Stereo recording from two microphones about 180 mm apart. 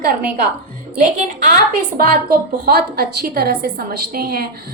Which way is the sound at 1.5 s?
50° right (ahead or behind).